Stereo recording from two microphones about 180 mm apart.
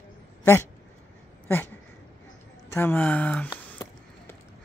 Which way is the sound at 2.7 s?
10° left (ahead or behind).